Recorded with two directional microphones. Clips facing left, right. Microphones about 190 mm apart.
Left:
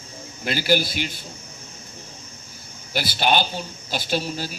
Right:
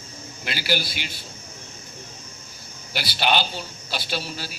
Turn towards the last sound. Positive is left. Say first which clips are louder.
# left 5 dB
turn(degrees=45)  # may be behind; listen again after turning